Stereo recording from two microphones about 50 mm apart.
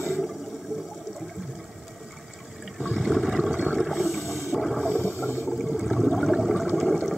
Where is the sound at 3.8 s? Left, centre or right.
Centre.